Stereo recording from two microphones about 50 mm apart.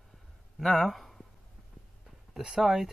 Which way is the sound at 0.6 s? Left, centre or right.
Centre.